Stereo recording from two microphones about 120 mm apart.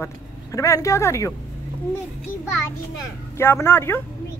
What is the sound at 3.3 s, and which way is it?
Speech, 20° left (ahead or behind).